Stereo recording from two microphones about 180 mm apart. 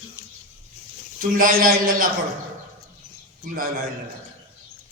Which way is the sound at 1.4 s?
50° right (ahead or behind).